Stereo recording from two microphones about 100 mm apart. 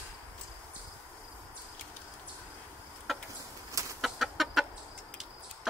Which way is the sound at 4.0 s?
Centre (ahead or behind).